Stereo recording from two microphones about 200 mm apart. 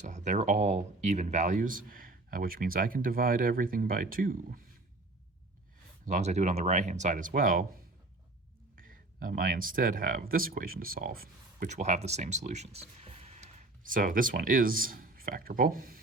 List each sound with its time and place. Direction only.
0.0 s speech: 35° right (ahead or behind)
6.1 s speech: 35° right (ahead or behind)
8.7 s speech: 45° right (ahead or behind)